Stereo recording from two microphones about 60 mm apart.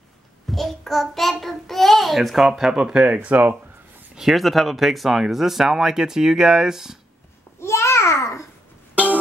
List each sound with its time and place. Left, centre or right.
0.5 s child singing: centre
1.4 s a child's voice: centre; by 3.5 s right
4.2 s speech: centre
7.6 s babbling: left
8.9 s music: right